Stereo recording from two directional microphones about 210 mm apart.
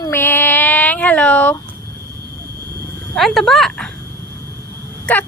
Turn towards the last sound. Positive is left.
turn(degrees=5)  # may be behind; listen again after turning